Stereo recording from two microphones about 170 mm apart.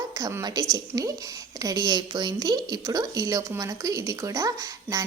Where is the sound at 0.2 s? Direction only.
20° right (ahead or behind).